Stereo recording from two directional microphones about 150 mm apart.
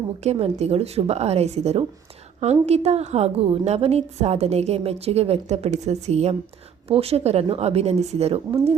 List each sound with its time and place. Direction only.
0.2 s a woman's voice: 45° right (ahead or behind)